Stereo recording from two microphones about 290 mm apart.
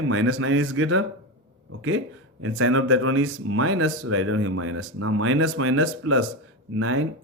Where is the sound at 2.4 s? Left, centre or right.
Right.